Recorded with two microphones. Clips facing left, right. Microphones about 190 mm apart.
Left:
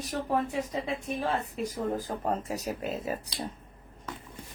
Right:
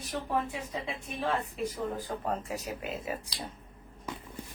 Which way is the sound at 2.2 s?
40° left (ahead or behind).